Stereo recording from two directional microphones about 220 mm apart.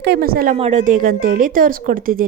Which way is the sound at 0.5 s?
30° right (ahead or behind).